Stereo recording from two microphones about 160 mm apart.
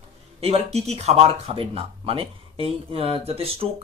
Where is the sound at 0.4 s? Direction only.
40° right (ahead or behind).